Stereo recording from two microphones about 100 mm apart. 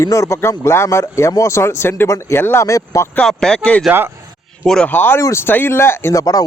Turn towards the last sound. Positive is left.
turn(degrees=25)  # may be behind; listen again after turning